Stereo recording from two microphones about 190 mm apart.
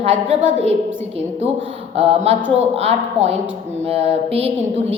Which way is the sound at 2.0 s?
35° right (ahead or behind).